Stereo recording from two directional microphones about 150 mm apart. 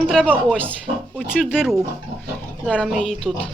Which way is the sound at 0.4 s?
5° left (ahead or behind).